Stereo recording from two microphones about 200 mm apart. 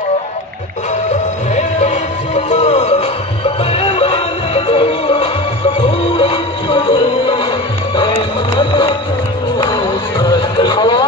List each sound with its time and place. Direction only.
1.5 s music: 35° left (ahead or behind)
8.5 s music: 25° left (ahead or behind)